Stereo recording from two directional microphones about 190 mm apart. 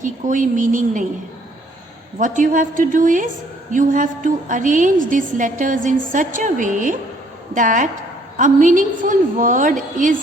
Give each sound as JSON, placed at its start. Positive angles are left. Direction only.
{"t": 0.0, "sound": "a woman's voice", "side_deg": -40}
{"t": 2.1, "sound": "a woman's voice", "side_deg": -40}